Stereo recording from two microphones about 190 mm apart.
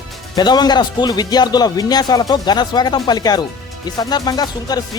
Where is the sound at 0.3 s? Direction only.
20° left (ahead or behind).